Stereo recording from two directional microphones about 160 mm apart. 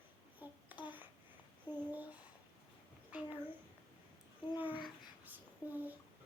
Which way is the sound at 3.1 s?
10° right (ahead or behind).